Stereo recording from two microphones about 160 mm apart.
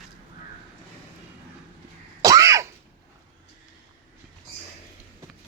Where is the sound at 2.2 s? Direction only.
20° right (ahead or behind).